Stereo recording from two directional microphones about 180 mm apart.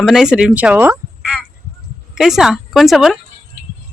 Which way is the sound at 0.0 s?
Centre (ahead or behind).